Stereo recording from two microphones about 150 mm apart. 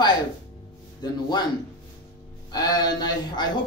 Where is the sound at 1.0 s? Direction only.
30° left (ahead or behind).